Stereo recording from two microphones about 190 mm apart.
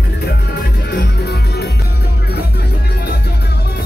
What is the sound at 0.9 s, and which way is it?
Music, 60° left (ahead or behind).